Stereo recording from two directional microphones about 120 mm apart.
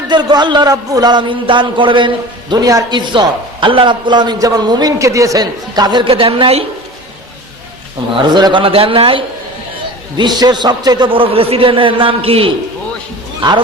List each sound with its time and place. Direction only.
0.1 s a man's voice: 35° right (ahead or behind); by 6.7 s 55° right (ahead or behind)
8.2 s a man's voice: 35° right (ahead or behind)
8.6 s a man's voice: 50° right (ahead or behind)
10.2 s a man's voice: 35° right (ahead or behind); by 12.5 s 50° right (ahead or behind)